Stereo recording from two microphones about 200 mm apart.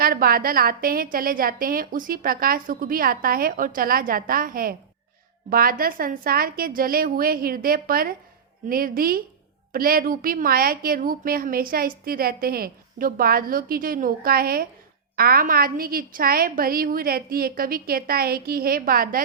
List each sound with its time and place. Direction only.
0.0 s a woman's voice: 45° right (ahead or behind)